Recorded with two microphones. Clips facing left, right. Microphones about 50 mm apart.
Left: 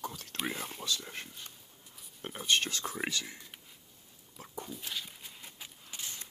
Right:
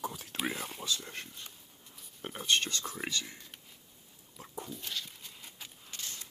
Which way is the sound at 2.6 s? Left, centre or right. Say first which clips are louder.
Left 2 dB; centre.